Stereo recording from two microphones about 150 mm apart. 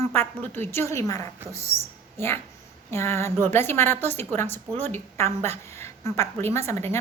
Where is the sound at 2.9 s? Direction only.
15° left (ahead or behind).